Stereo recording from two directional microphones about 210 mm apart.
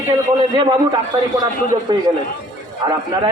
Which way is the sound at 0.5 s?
20° right (ahead or behind).